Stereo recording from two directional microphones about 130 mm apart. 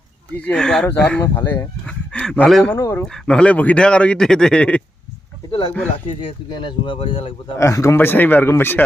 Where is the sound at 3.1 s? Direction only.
5° left (ahead or behind).